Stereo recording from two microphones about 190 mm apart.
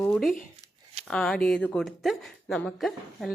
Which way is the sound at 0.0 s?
5° left (ahead or behind).